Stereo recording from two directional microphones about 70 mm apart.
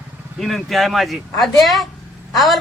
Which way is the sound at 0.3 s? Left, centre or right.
Centre.